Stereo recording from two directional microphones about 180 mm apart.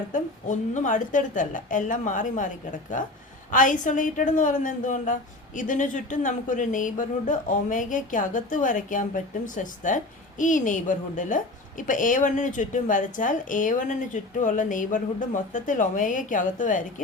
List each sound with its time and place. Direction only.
0.1 s a man's voice: 45° left (ahead or behind)
3.5 s a man's voice: 45° left (ahead or behind)